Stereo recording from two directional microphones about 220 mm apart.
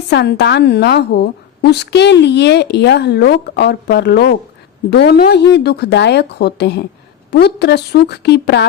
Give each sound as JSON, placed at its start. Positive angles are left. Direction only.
{"t": 0.1, "sound": "a woman's voice", "side_deg": 50}